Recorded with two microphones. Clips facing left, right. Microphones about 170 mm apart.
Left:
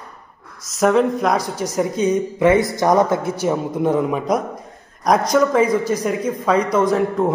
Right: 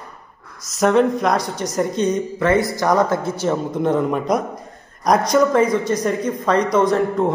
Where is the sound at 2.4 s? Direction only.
20° left (ahead or behind).